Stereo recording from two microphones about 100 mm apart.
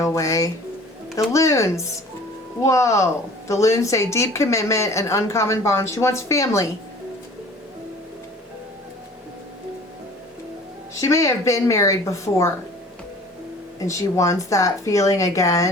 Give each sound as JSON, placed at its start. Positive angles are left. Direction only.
{"t": 0.0, "sound": "speech", "side_deg": 35}
{"t": 10.9, "sound": "speech", "side_deg": 30}
{"t": 13.7, "sound": "speech", "side_deg": 30}